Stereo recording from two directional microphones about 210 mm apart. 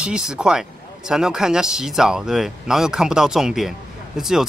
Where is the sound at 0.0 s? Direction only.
5° right (ahead or behind).